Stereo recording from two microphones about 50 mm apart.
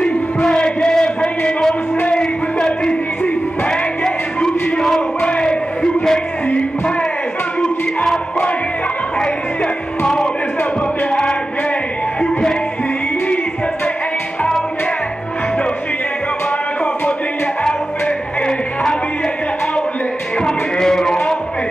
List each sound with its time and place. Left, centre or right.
0.0 s a sound: centre
3.6 s music: centre
5.2 s a sound: left
8.0 s music: centre
10.0 s music: centre
20.3 s music: centre